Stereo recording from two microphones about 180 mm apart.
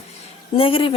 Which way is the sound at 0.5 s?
30° left (ahead or behind).